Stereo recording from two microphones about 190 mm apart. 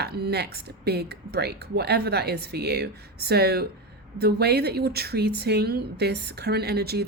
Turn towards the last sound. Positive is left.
turn(degrees=-55)  # may be behind; listen again after turning